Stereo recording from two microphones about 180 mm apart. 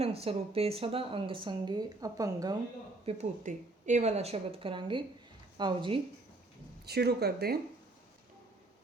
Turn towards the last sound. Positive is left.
turn(degrees=-60)  # may be behind; listen again after turning